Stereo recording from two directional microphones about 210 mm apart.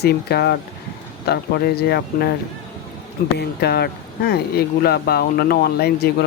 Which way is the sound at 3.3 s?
50° left (ahead or behind).